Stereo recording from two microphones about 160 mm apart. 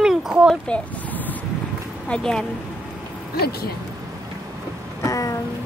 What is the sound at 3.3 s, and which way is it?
Speech, 75° left (ahead or behind).